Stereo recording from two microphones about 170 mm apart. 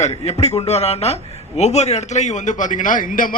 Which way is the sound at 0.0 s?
40° left (ahead or behind).